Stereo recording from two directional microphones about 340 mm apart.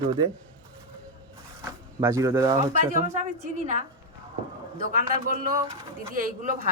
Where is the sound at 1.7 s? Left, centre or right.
Centre.